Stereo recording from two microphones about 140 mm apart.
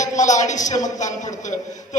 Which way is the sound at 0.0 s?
60° left (ahead or behind).